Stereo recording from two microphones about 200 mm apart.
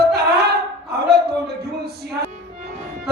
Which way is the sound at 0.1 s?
55° right (ahead or behind).